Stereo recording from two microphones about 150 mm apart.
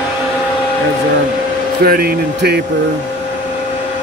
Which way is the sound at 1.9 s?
90° right.